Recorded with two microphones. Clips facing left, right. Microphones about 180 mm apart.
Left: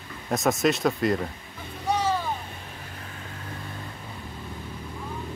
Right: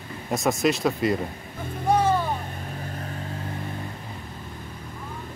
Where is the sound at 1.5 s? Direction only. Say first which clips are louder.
Right 5 dB; 55° right (ahead or behind).